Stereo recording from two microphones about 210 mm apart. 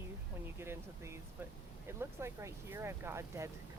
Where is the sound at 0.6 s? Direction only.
10° right (ahead or behind).